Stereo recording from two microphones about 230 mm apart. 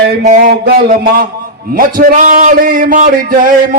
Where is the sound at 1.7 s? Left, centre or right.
Right.